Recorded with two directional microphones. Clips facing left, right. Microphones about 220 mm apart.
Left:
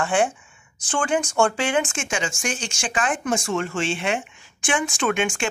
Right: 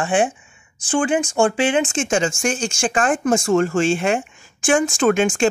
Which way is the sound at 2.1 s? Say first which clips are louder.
Right 7 dB; 40° right (ahead or behind).